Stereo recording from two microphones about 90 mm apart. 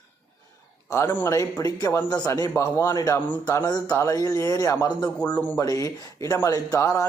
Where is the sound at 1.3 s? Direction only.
40° left (ahead or behind).